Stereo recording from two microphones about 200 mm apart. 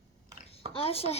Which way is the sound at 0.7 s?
30° left (ahead or behind).